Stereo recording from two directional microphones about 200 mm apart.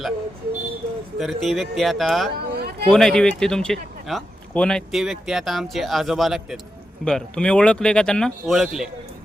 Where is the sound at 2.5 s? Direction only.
50° right (ahead or behind).